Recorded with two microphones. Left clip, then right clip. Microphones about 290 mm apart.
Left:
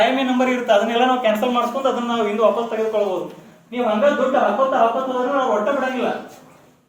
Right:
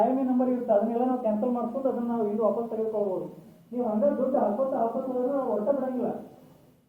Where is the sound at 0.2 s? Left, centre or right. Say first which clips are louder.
Left 8 dB; left.